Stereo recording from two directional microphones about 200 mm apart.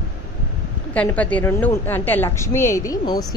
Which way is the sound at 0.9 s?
5° left (ahead or behind).